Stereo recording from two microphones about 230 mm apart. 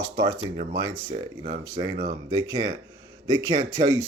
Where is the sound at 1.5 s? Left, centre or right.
Centre.